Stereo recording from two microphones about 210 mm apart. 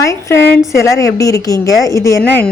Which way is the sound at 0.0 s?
15° left (ahead or behind).